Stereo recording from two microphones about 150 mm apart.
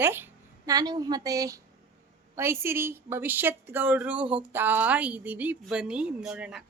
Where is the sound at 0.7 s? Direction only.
25° right (ahead or behind); by 6.6 s 5° right (ahead or behind).